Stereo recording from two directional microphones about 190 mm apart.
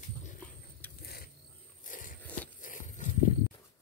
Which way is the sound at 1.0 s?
55° left (ahead or behind).